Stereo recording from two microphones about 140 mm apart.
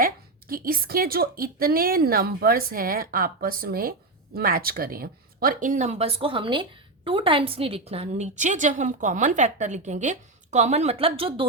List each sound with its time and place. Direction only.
0.0 s a woman's voice: 90° right; by 11.4 s 40° right (ahead or behind)